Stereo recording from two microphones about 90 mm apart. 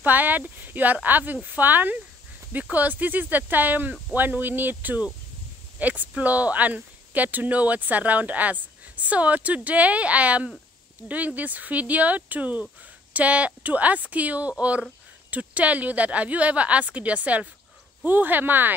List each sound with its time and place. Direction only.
0.0 s speech: 20° right (ahead or behind)